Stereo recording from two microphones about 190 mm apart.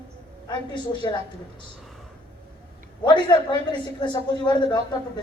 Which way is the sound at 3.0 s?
25° left (ahead or behind).